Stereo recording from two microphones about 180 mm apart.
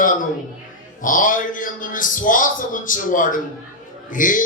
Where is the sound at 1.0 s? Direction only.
50° left (ahead or behind).